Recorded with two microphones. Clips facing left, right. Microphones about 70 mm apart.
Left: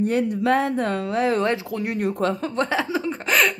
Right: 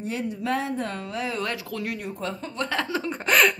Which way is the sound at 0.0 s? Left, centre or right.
Left.